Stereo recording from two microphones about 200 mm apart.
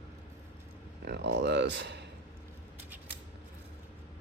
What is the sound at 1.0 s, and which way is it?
Speech, 55° right (ahead or behind).